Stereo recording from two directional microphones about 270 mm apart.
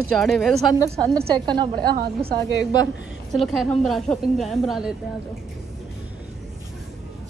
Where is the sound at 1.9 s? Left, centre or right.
Right.